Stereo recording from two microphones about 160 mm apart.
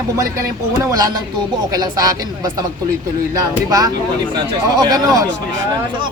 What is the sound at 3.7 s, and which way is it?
A woman's voice, 25° right (ahead or behind).